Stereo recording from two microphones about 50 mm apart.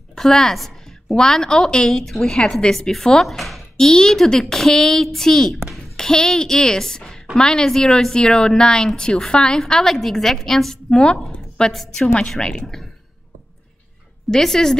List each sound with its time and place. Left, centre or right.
0.1 s a sound: centre
1.1 s a woman's voice: centre
3.7 s a woman's voice: centre
14.3 s a woman's voice: centre